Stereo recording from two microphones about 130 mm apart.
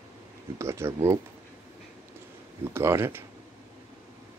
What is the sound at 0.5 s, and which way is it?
Speech, 20° right (ahead or behind).